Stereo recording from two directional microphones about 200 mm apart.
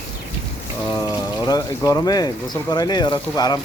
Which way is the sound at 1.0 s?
20° left (ahead or behind).